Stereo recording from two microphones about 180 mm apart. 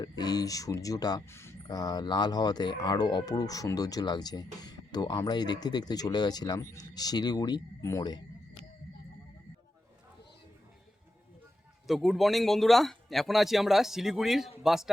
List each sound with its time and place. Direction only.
0.0 s speech: 20° left (ahead or behind)
11.9 s speech: centre (ahead or behind)